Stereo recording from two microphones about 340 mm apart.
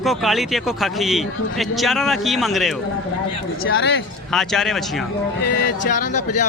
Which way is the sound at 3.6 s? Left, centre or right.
Left.